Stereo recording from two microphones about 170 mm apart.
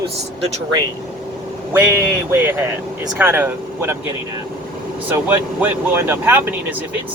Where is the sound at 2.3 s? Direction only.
10° right (ahead or behind).